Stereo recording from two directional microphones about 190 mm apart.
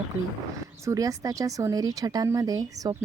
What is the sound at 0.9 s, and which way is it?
A woman's voice, 20° right (ahead or behind).